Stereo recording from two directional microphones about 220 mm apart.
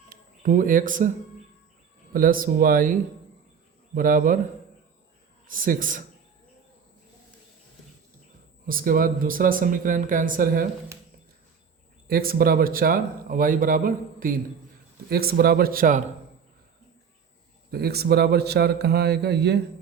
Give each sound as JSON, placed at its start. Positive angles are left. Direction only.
{"t": 0.1, "sound": "speech", "side_deg": -40}
{"t": 2.1, "sound": "speech", "side_deg": -40}
{"t": 3.9, "sound": "speech", "side_deg": -40}
{"t": 5.5, "sound": "speech", "side_deg": -40}
{"t": 8.6, "sound": "speech", "side_deg": -40}
{"t": 12.0, "sound": "a man's voice", "side_deg": -40}
{"t": 17.7, "sound": "a man's voice", "side_deg": -45}